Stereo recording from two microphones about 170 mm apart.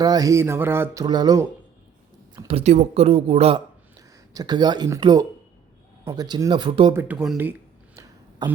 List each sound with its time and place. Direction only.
0.0 s speech: 20° right (ahead or behind)
1.0 s speech: 25° right (ahead or behind)
2.5 s speech: 40° right (ahead or behind)
4.4 s speech: 25° right (ahead or behind)
6.9 s speech: 10° right (ahead or behind)
8.4 s speech: 25° right (ahead or behind)